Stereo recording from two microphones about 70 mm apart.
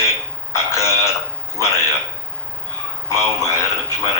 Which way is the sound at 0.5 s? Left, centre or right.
Left.